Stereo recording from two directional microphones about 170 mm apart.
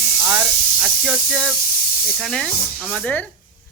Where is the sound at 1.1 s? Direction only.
5° right (ahead or behind).